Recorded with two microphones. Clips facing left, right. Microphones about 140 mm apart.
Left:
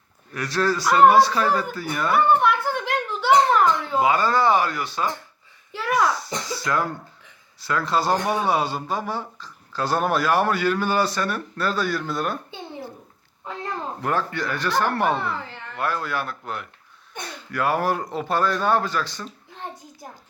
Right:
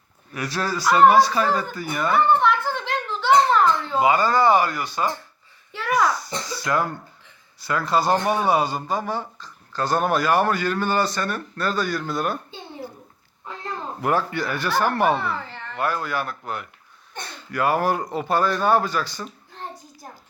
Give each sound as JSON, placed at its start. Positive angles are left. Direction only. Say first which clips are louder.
{"t": 0.3, "sound": "speech", "louder": "left 3 dB", "side_deg": -5}
{"t": 14.0, "sound": "speech", "louder": "right 3 dB", "side_deg": -10}
{"t": 15.2, "sound": "a sound", "louder": "right 1 dB", "side_deg": 15}
{"t": 15.8, "sound": "speech", "louder": "right 1 dB", "side_deg": 0}